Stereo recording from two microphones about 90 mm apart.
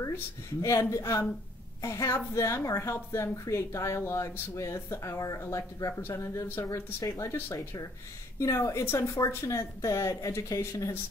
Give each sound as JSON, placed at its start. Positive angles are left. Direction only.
{"t": 0.0, "sound": "a woman's voice", "side_deg": 35}
{"t": 8.4, "sound": "a woman's voice", "side_deg": 30}